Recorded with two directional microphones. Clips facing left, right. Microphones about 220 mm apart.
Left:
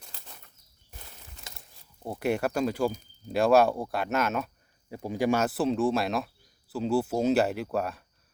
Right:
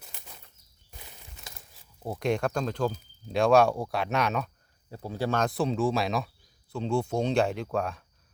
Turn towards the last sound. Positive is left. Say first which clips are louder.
# even
turn(degrees=5)  # may be behind; listen again after turning